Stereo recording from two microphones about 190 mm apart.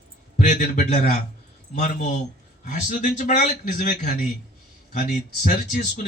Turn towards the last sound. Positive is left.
turn(degrees=35)  # may be behind; listen again after turning